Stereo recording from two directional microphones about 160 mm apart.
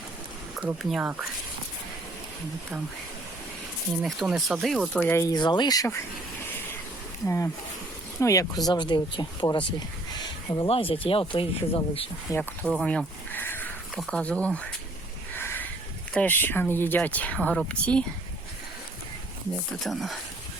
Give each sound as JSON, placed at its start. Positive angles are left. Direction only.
{"t": 0.5, "sound": "speech", "side_deg": -5}
{"t": 4.0, "sound": "speech", "side_deg": 0}
{"t": 5.0, "sound": "speech", "side_deg": 20}
{"t": 7.3, "sound": "speech", "side_deg": 15}
{"t": 10.1, "sound": "a sound", "side_deg": 25}
{"t": 10.7, "sound": "speech", "side_deg": 35}
{"t": 12.3, "sound": "speech", "side_deg": 10}
{"t": 15.4, "sound": "a sound", "side_deg": 15}
{"t": 16.1, "sound": "speech", "side_deg": 10}
{"t": 19.8, "sound": "speech", "side_deg": 0}